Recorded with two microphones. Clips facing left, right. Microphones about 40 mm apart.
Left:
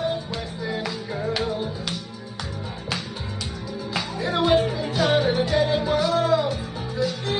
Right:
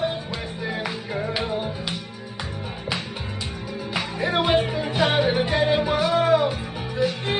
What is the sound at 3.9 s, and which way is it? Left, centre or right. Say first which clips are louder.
Music: right 2 dB; right.